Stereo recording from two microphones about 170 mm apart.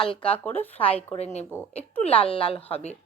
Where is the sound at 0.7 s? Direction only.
35° left (ahead or behind).